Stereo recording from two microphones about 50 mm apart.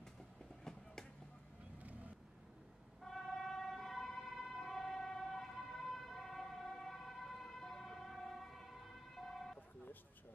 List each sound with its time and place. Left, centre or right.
0.7 s a sound: centre
1.8 s vehicle: right
3.0 s emergency vehicle: centre